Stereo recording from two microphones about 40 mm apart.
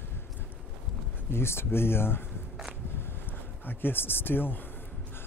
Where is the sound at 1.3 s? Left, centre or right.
Left.